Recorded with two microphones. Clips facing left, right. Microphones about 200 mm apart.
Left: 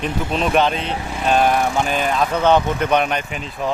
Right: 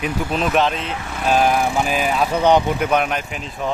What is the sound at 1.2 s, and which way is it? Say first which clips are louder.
Speech: even; 5° right (ahead or behind).